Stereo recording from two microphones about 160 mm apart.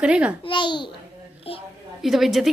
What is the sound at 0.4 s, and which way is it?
A child's voice, 30° left (ahead or behind).